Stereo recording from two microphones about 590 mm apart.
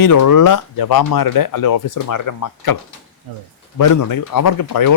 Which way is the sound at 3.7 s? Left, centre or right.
Left.